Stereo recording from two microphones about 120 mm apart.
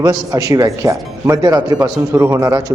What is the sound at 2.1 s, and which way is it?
Speech, 25° right (ahead or behind).